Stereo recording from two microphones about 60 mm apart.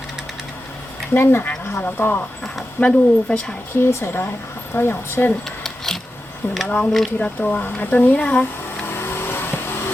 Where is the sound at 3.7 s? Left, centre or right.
Left.